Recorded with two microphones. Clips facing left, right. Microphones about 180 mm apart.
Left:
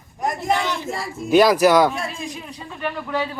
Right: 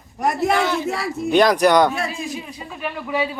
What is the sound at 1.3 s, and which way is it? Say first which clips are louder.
Speech: left 1 dB; 5° left (ahead or behind).